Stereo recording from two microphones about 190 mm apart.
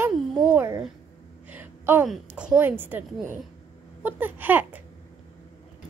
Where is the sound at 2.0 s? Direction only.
5° right (ahead or behind).